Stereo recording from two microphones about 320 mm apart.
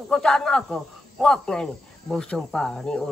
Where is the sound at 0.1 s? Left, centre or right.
Centre.